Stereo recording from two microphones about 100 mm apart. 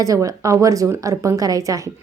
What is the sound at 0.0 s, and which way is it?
A woman's voice, 35° right (ahead or behind).